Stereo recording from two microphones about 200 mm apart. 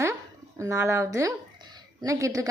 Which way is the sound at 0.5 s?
15° right (ahead or behind).